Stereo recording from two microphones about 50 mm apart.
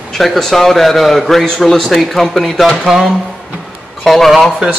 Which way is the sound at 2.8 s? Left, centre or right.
Centre.